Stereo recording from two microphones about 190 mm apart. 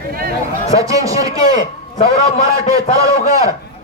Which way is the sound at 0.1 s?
50° right (ahead or behind).